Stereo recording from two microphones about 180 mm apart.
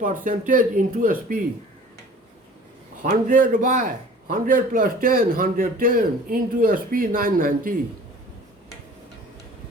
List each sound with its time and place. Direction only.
0.0 s a man's voice: 45° right (ahead or behind)
3.0 s a man's voice: 50° right (ahead or behind)